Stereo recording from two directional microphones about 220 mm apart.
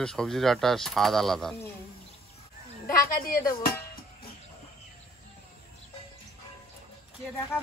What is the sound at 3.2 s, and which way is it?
Music, 40° left (ahead or behind).